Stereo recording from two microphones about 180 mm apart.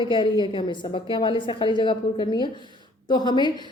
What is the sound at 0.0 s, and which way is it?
A woman's voice, 25° left (ahead or behind).